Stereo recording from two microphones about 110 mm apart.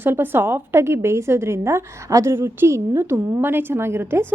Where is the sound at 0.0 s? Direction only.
20° right (ahead or behind).